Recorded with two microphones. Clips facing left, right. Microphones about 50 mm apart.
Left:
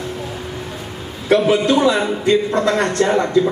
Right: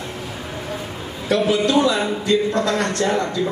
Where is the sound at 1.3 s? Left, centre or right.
Left.